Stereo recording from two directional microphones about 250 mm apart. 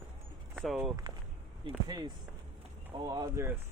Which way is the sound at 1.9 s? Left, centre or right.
Centre.